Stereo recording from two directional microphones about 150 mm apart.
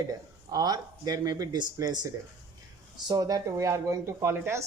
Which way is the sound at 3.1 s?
25° right (ahead or behind).